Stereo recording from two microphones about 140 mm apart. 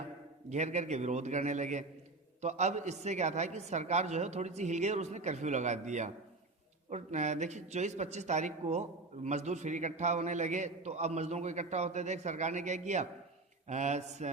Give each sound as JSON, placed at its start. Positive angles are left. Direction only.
{"t": 0.5, "sound": "a man's voice", "side_deg": -55}